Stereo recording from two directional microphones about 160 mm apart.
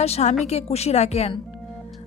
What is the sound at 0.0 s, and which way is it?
Speech, 40° left (ahead or behind).